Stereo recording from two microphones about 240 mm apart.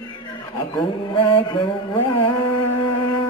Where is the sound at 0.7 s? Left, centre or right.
Centre.